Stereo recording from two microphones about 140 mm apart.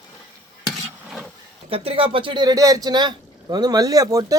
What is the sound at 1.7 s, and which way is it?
Speech, 40° right (ahead or behind).